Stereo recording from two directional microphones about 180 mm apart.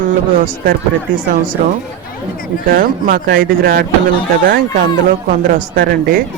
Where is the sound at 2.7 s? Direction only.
50° right (ahead or behind).